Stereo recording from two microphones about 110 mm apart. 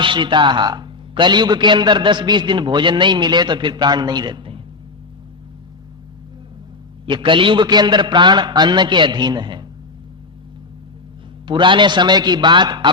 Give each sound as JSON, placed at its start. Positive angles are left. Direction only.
{"t": 0.0, "sound": "a man's voice", "side_deg": -50}
{"t": 7.0, "sound": "a man's voice", "side_deg": -50}
{"t": 11.4, "sound": "a man's voice", "side_deg": -45}